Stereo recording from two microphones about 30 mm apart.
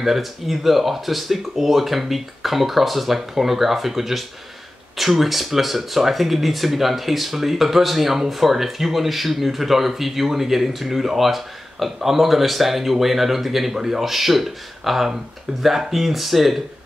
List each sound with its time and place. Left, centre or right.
0.0 s speech: centre